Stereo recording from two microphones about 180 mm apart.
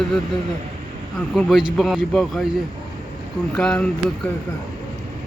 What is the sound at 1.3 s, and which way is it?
Speech, centre (ahead or behind).